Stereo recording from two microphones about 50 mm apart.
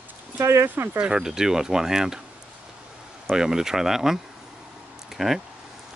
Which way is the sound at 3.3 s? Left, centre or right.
Centre.